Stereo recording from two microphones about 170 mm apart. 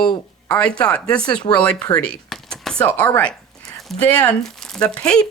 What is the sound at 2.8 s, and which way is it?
Speech, 10° left (ahead or behind).